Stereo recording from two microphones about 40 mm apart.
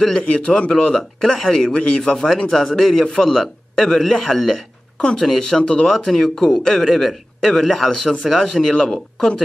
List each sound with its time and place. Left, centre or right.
0.3 s a man's voice: left
1.2 s a man's voice: centre
1.7 s speech: left
2.1 s a man's voice: centre
4.9 s speech: left
5.2 s a man's voice: centre
5.6 s speech: left
5.9 s a man's voice: centre
8.7 s speech: left